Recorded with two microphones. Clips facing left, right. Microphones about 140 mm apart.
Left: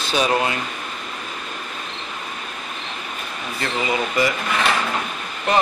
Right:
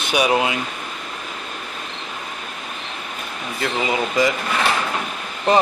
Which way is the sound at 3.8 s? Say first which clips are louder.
Right 1 dB; 15° right (ahead or behind).